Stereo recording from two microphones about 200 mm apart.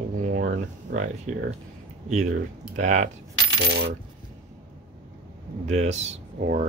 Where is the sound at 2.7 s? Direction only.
35° right (ahead or behind).